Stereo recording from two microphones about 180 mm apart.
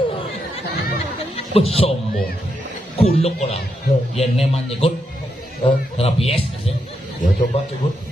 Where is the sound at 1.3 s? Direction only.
35° left (ahead or behind).